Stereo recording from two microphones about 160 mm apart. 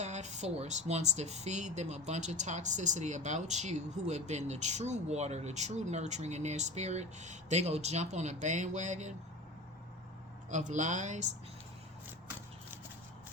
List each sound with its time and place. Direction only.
0.0 s speech: 45° right (ahead or behind)
10.5 s speech: 50° right (ahead or behind)